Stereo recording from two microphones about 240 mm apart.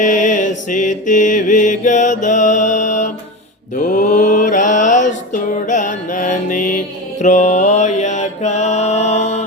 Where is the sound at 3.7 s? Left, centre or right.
Left.